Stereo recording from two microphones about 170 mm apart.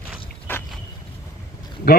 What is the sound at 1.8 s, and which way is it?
Speech, 65° left (ahead or behind).